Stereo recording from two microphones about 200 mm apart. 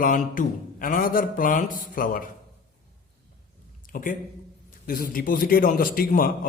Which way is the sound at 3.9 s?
40° left (ahead or behind).